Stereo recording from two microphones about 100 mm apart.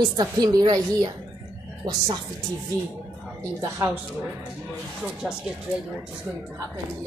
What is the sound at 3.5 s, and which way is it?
Speech, 25° right (ahead or behind).